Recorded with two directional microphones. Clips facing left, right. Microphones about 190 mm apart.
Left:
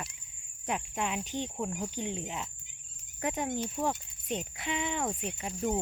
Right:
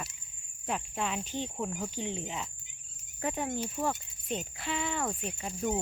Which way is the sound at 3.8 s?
15° left (ahead or behind).